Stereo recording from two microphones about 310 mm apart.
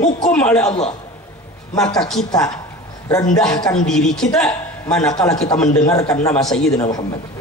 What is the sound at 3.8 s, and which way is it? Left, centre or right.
A woman's voice, centre.